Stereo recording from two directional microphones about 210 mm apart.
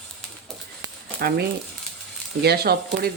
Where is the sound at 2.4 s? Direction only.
50° right (ahead or behind).